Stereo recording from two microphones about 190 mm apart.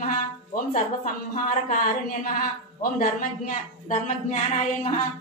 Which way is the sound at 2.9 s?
45° left (ahead or behind).